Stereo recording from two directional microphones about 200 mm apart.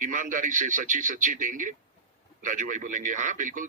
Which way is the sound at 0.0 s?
40° right (ahead or behind).